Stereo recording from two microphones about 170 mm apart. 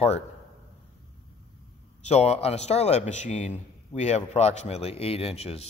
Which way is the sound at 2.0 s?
40° left (ahead or behind).